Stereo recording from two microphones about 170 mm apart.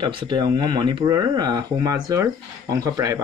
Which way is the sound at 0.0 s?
25° right (ahead or behind).